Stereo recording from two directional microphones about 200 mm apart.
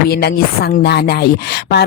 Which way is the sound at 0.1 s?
50° left (ahead or behind).